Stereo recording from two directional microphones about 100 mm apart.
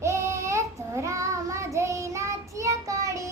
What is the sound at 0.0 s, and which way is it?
Child singing, 30° right (ahead or behind).